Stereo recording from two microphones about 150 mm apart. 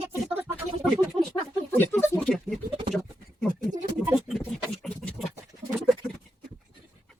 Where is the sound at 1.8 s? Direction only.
15° left (ahead or behind).